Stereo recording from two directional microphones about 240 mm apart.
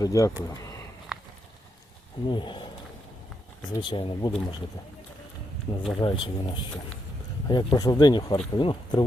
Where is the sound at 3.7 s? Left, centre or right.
Centre.